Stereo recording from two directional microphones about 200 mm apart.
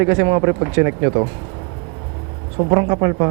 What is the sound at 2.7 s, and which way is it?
Speech, 20° right (ahead or behind).